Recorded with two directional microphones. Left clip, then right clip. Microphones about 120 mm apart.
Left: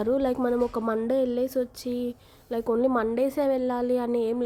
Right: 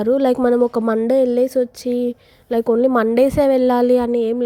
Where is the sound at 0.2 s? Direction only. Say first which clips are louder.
Right 10 dB; 70° right (ahead or behind).